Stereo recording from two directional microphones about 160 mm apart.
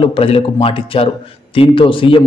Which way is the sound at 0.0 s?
35° left (ahead or behind).